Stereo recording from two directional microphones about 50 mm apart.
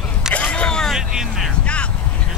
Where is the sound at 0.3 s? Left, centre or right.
Left.